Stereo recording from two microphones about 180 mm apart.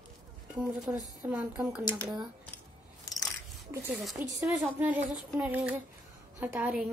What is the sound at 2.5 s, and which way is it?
Scissors, 20° left (ahead or behind).